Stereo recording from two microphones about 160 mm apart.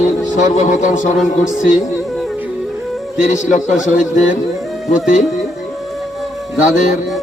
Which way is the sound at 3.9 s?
50° left (ahead or behind).